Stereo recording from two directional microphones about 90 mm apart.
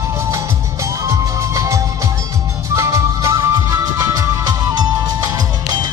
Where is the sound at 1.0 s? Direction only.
35° right (ahead or behind).